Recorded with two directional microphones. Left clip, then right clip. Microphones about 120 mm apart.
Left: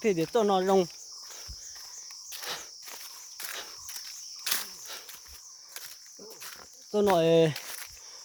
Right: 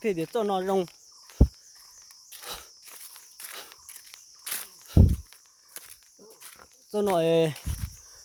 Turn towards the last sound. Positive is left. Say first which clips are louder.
# even
turn(degrees=-35)  # may be behind; listen again after turning